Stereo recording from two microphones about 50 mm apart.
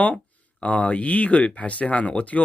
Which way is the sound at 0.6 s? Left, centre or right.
Left.